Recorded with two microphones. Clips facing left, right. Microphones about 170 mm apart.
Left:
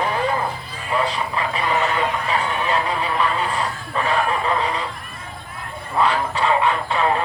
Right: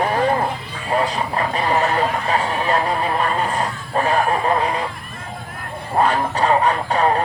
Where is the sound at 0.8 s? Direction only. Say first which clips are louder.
Right 2 dB; 45° right (ahead or behind).